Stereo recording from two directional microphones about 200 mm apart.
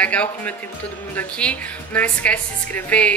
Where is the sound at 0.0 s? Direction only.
5° left (ahead or behind).